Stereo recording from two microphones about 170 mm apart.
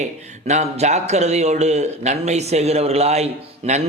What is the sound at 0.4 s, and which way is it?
A man's voice, 45° right (ahead or behind).